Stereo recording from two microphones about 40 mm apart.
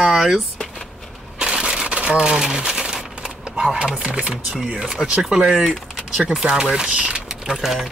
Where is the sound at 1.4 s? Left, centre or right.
Centre.